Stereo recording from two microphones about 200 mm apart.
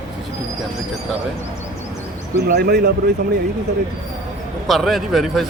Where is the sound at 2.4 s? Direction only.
50° right (ahead or behind).